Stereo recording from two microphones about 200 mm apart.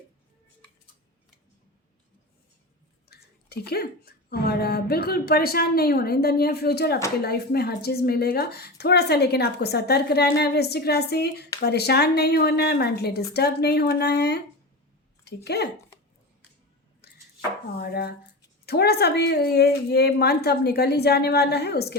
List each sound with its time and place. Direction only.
3.1 s a woman's voice: 50° left (ahead or behind)
15.4 s speech: 55° left (ahead or behind)
17.0 s chopping: 50° left (ahead or behind)
17.7 s a woman's voice: 50° left (ahead or behind)